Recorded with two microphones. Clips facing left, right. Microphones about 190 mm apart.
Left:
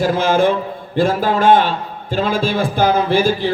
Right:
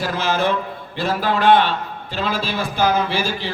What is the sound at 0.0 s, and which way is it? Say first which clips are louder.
A man's voice: left 6 dB; 50° left (ahead or behind).